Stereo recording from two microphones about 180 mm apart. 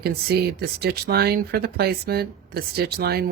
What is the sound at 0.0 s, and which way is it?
Speech, 60° right (ahead or behind).